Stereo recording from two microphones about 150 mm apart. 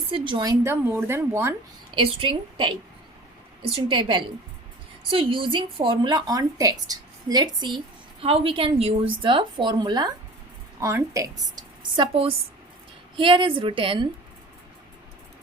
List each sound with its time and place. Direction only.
0.1 s a woman's voice: 30° right (ahead or behind)
0.6 s speech: 15° right (ahead or behind)
2.0 s a woman's voice: 35° right (ahead or behind)
3.8 s a woman's voice: 35° right (ahead or behind)
10.8 s a woman's voice: 20° right (ahead or behind)
11.9 s a woman's voice: 40° right (ahead or behind)